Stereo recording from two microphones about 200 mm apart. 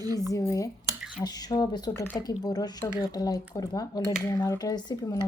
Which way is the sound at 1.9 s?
10° left (ahead or behind).